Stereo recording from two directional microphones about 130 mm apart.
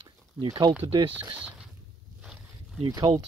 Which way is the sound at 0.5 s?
30° right (ahead or behind).